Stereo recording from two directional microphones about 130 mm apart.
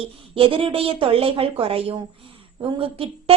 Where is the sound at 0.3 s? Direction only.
45° right (ahead or behind).